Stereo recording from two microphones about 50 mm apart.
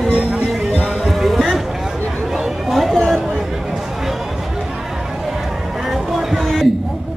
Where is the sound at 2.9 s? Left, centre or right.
Centre.